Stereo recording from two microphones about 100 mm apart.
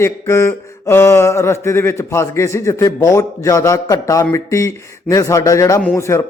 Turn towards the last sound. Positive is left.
turn(degrees=30)  # may be behind; listen again after turning